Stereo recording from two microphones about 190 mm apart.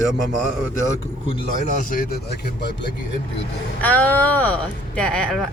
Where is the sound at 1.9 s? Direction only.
50° left (ahead or behind).